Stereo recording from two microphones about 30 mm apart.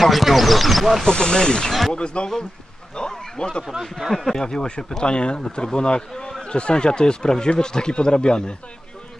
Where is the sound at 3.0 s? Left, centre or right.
Left.